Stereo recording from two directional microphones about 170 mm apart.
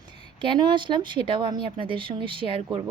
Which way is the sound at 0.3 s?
25° right (ahead or behind).